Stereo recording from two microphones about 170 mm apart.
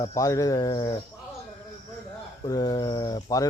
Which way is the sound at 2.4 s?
25° left (ahead or behind).